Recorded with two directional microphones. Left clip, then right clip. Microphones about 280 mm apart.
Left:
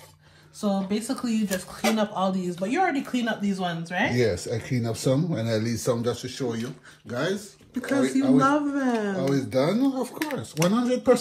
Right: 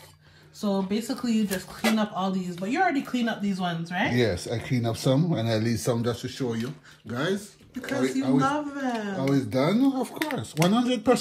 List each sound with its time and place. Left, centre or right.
0.6 s speech: centre
4.1 s speech: right
6.2 s speech: centre; by 11.1 s right